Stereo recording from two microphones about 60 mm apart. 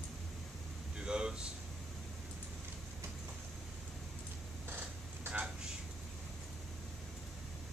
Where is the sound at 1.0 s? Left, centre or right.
Centre.